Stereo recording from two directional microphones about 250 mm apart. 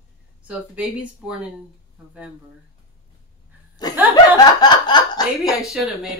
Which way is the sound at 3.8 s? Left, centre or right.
Centre.